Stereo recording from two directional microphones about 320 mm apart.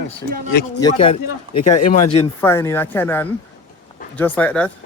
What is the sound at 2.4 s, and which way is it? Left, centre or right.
Speech, centre.